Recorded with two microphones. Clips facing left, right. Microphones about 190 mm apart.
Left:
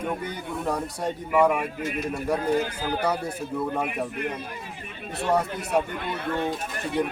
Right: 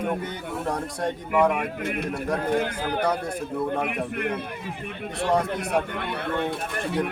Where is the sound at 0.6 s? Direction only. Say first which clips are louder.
Even; 10° left (ahead or behind).